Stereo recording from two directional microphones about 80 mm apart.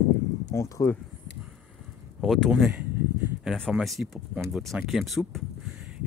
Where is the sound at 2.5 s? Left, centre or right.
Centre.